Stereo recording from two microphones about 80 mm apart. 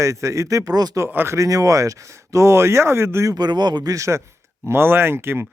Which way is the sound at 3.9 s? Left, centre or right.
Right.